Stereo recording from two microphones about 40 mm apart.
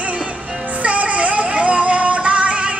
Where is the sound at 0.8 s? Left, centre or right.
Right.